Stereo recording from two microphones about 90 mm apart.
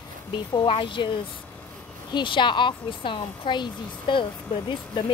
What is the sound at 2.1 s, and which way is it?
A woman's voice, 60° left (ahead or behind).